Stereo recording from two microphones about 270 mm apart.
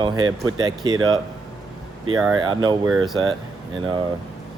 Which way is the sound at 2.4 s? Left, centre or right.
Centre.